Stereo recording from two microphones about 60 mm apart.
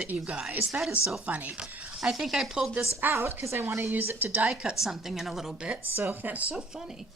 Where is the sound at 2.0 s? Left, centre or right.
Centre.